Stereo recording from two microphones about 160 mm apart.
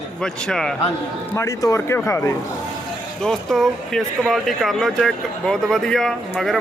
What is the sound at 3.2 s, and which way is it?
Speech, centre (ahead or behind).